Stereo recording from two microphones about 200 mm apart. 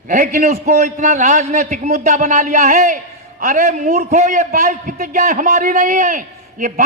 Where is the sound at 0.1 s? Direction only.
40° right (ahead or behind).